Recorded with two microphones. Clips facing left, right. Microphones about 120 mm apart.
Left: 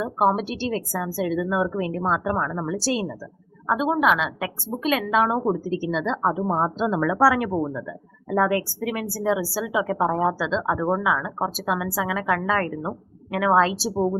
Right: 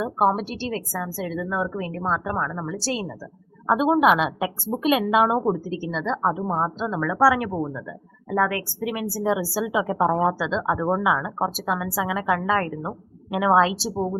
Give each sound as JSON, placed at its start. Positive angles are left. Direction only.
{"t": 0.0, "sound": "a woman's voice", "side_deg": 0}
{"t": 3.8, "sound": "a woman's voice", "side_deg": -15}
{"t": 5.4, "sound": "a woman's voice", "side_deg": 0}
{"t": 7.2, "sound": "a woman's voice", "side_deg": 0}